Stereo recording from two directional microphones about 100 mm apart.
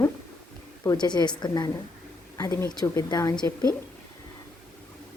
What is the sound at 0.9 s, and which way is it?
A woman's voice, 45° left (ahead or behind).